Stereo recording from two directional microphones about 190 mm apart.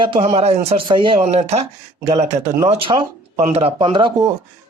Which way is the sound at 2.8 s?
25° right (ahead or behind).